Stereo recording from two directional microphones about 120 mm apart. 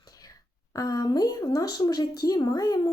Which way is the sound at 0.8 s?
30° left (ahead or behind).